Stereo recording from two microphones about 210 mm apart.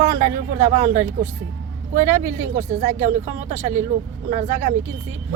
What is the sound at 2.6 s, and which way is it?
Speech, 35° right (ahead or behind).